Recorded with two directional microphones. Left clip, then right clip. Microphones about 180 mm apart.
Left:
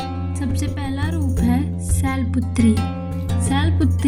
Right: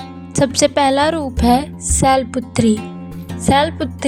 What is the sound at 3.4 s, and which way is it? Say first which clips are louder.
Speech: right 10 dB; 35° right (ahead or behind).